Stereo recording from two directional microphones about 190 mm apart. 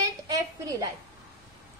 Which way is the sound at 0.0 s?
20° right (ahead or behind).